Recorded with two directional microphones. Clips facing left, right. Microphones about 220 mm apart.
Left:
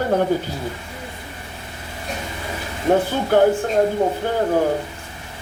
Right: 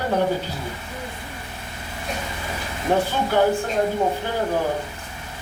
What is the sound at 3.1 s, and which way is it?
Speech, 50° left (ahead or behind).